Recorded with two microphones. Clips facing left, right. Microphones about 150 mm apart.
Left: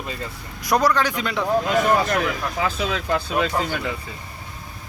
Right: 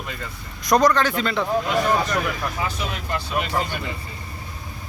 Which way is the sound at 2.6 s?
90° left.